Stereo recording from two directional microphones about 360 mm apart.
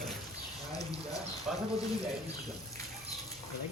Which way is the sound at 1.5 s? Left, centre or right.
Centre.